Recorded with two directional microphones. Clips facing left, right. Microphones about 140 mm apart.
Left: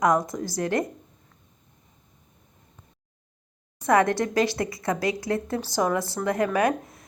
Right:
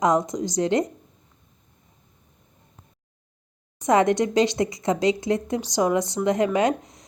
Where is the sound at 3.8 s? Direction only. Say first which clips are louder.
Right 2 dB; 20° right (ahead or behind).